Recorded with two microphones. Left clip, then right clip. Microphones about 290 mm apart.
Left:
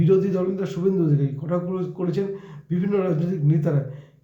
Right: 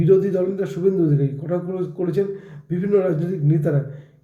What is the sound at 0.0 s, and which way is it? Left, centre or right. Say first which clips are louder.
Speech: right 3 dB; centre.